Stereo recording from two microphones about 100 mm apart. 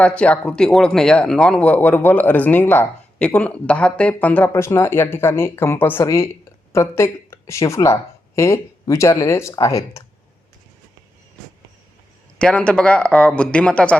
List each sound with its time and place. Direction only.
0.0 s speech: 10° left (ahead or behind)
4.5 s speech: 30° left (ahead or behind)
12.4 s speech: 10° left (ahead or behind)